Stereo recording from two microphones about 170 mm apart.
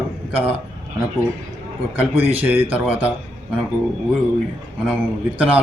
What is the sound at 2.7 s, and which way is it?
Speech, 10° right (ahead or behind).